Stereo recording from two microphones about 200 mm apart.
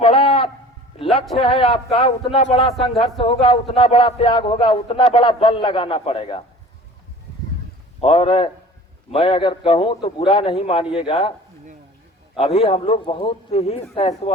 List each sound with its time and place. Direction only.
0.0 s a sound: 30° left (ahead or behind)
1.4 s a man's voice: 25° left (ahead or behind)
8.0 s a man's voice: 25° left (ahead or behind)
12.4 s a man's voice: 30° left (ahead or behind)